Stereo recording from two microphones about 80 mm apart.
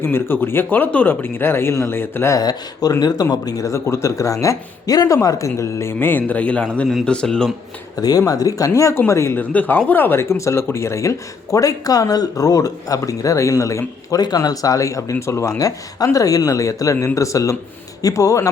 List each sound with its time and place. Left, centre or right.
0.0 s speech: left
2.3 s speech: left
3.4 s speech: left; by 7.5 s centre
8.0 s speech: left
9.4 s speech: left
14.2 s speech: left